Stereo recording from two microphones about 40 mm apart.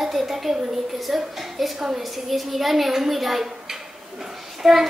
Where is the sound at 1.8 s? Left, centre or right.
Centre.